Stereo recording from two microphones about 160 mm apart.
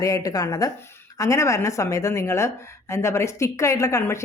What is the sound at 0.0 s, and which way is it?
A woman's voice, 20° left (ahead or behind).